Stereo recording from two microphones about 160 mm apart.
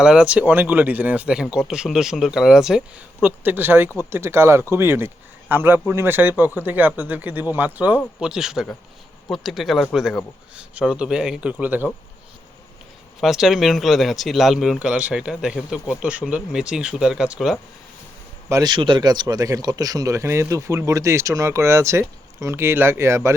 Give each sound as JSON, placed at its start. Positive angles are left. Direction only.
{"t": 0.0, "sound": "speech", "side_deg": -5}
{"t": 13.1, "sound": "speech", "side_deg": 0}
{"t": 18.4, "sound": "speech", "side_deg": -20}